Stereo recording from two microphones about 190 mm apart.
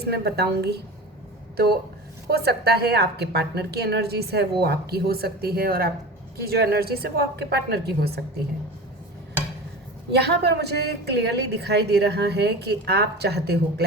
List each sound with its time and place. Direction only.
0.0 s a woman's voice: 60° right (ahead or behind)
10.1 s a woman's voice: 60° right (ahead or behind)